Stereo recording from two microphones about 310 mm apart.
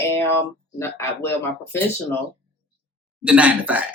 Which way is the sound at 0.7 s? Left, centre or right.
Centre.